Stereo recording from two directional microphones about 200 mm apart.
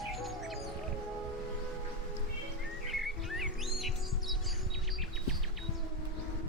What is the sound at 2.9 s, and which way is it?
Music, centre (ahead or behind).